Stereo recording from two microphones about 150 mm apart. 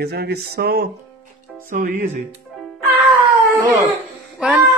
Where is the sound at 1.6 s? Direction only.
60° right (ahead or behind).